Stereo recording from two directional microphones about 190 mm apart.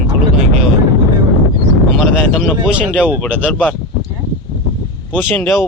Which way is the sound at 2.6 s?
5° right (ahead or behind).